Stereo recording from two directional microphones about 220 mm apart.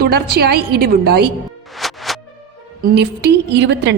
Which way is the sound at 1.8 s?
Centre (ahead or behind).